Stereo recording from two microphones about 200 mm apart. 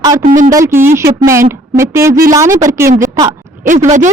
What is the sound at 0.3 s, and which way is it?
Speech, 40° right (ahead or behind).